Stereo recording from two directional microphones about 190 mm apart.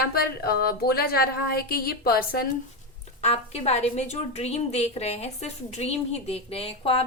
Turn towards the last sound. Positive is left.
turn(degrees=30)  # may be behind; listen again after turning